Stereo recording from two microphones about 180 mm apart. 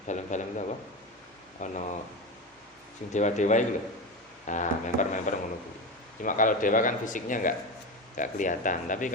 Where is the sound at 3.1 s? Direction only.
40° left (ahead or behind).